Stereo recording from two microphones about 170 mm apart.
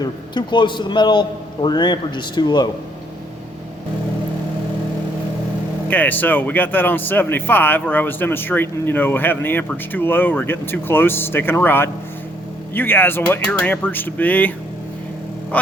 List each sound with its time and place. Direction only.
0.0 s a man's voice: 25° left (ahead or behind)
5.9 s speech: 10° left (ahead or behind)
15.5 s speech: 10° left (ahead or behind)